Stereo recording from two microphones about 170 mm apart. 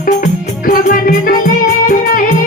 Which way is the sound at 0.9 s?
55° left (ahead or behind).